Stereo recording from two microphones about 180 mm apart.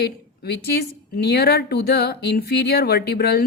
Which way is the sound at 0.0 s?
65° left (ahead or behind).